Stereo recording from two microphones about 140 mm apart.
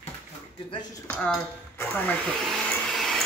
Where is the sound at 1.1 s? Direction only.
5° left (ahead or behind).